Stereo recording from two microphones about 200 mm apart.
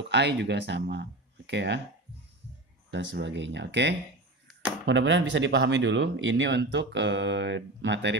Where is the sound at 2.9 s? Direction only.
65° right (ahead or behind).